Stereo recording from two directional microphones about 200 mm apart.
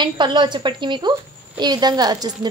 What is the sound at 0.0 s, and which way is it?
A woman's voice, 20° right (ahead or behind).